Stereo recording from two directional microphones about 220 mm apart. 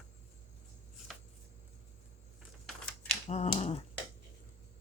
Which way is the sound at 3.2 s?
30° left (ahead or behind).